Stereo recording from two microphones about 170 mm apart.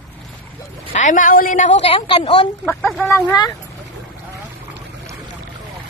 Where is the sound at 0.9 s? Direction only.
45° left (ahead or behind); by 2.4 s 30° left (ahead or behind).